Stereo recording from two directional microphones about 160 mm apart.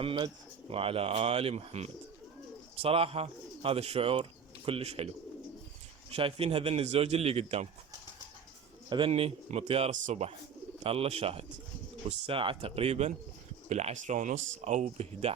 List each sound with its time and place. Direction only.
0.7 s a man's voice: 35° right (ahead or behind)
6.1 s a man's voice: 35° right (ahead or behind)
8.9 s a man's voice: 35° right (ahead or behind)